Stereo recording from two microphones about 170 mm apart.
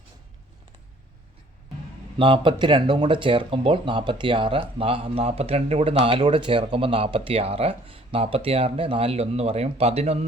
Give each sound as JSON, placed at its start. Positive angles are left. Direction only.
{"t": 2.1, "sound": "speech", "side_deg": -30}